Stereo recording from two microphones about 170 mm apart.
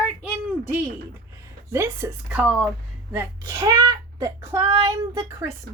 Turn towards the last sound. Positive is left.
turn(degrees=-20)  # may be behind; listen again after turning